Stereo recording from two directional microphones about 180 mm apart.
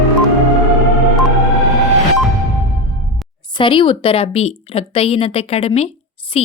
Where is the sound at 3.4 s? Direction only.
25° left (ahead or behind).